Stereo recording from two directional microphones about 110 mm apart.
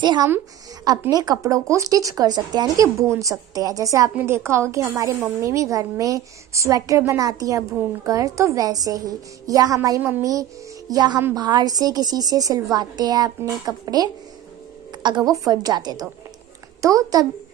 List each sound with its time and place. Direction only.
0.0 s a woman's voice: 45° right (ahead or behind)
4.1 s a woman's voice: 20° right (ahead or behind)
10.9 s a woman's voice: 40° right (ahead or behind)